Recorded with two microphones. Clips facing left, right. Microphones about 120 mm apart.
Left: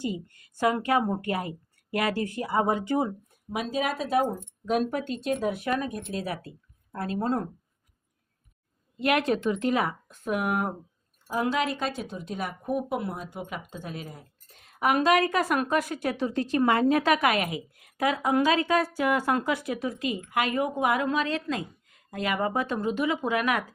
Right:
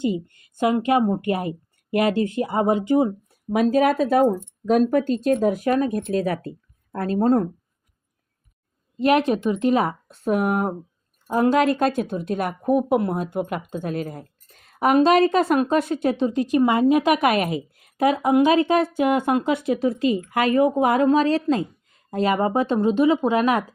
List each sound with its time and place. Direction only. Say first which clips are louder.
0.0 s a woman's voice: right 8 dB; 20° right (ahead or behind)
3.5 s speech: right 11 dB; 50° right (ahead or behind)
9.0 s speech: right 6 dB; 25° right (ahead or behind)
11.3 s speech: right 9 dB; 45° right (ahead or behind); by 23.6 s 30° right (ahead or behind)